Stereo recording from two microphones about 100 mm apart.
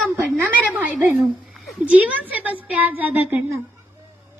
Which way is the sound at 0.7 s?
20° right (ahead or behind).